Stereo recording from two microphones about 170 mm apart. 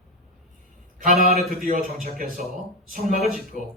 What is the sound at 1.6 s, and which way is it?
Speech, 55° right (ahead or behind).